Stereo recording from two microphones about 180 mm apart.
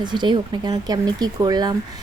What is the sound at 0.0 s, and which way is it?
Speech, 25° right (ahead or behind).